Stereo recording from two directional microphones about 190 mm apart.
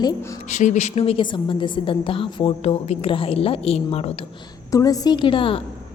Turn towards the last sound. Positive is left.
turn(degrees=25)  # may be behind; listen again after turning